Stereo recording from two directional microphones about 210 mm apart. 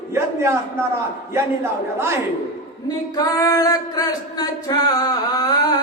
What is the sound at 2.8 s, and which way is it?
Singing, 20° left (ahead or behind).